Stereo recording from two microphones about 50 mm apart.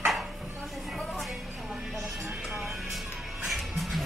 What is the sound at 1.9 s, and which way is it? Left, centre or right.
Music, centre.